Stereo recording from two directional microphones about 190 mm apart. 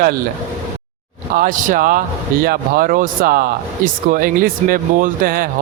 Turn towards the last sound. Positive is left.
turn(degrees=-50)  # may be behind; listen again after turning